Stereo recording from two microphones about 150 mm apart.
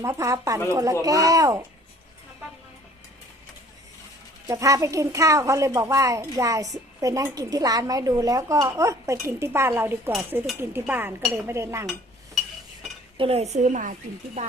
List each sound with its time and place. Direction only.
0.0 s a woman's voice: 20° right (ahead or behind)
4.4 s a woman's voice: 20° right (ahead or behind)
13.1 s speech: 40° right (ahead or behind)